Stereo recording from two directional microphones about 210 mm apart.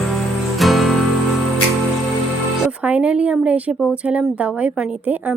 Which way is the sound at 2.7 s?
5° right (ahead or behind).